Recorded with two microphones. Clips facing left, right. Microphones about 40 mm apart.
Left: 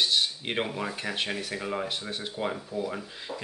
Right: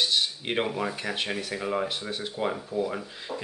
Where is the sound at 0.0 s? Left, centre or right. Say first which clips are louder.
Even; centre.